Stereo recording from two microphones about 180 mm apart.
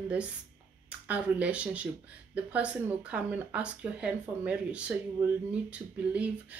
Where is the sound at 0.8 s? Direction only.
5° right (ahead or behind).